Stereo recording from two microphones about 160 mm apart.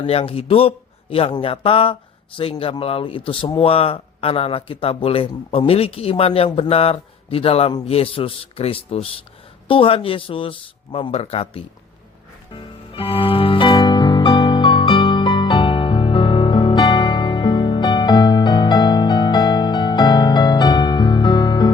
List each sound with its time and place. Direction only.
0.0 s a man's voice: 35° left (ahead or behind)
12.5 s music: 35° left (ahead or behind)